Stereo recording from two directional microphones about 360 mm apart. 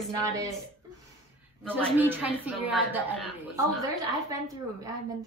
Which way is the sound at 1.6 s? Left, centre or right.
Centre.